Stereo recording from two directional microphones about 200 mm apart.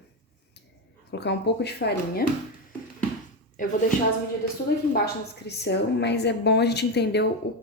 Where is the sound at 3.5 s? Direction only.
40° left (ahead or behind).